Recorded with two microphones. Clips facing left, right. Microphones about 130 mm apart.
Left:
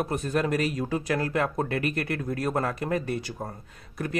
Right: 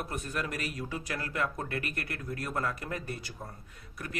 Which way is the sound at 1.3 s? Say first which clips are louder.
Left 7 dB; 90° left.